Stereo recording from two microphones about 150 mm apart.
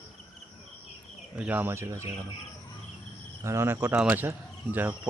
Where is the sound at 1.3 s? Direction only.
10° right (ahead or behind).